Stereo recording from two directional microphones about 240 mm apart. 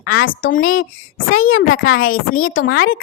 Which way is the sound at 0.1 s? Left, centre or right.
Left.